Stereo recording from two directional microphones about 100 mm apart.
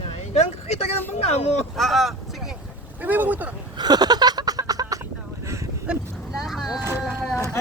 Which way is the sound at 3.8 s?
45° right (ahead or behind).